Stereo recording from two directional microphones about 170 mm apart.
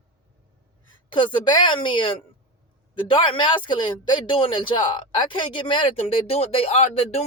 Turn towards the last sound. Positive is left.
turn(degrees=40)  # may be behind; listen again after turning